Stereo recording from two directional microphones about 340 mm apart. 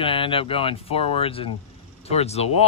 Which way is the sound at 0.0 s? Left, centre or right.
Centre.